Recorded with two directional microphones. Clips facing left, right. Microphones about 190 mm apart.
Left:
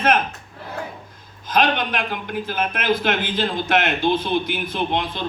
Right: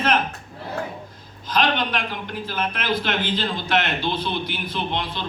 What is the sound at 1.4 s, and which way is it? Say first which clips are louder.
A man's voice: left 2 dB; 50° left (ahead or behind).